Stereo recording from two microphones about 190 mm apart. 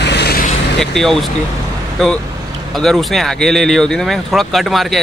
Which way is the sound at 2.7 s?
Centre (ahead or behind).